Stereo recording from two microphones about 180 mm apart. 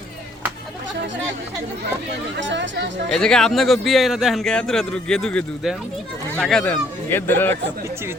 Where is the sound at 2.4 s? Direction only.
90° right.